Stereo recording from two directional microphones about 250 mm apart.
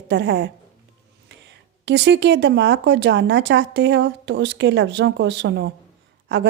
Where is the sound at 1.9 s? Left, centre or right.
Right.